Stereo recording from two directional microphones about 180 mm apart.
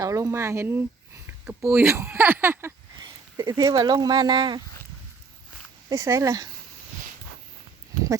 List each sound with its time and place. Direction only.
0.0 s speech: 15° right (ahead or behind)
5.9 s speech: 15° right (ahead or behind)